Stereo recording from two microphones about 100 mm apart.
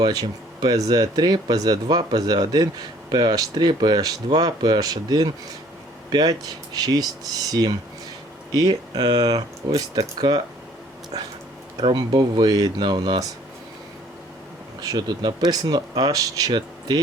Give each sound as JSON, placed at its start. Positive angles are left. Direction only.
{"t": 0.0, "sound": "speech", "side_deg": -40}
{"t": 11.9, "sound": "speech", "side_deg": -40}
{"t": 14.8, "sound": "speech", "side_deg": -40}